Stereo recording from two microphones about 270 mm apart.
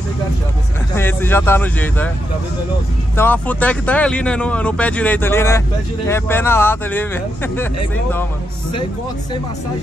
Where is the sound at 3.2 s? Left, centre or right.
Centre.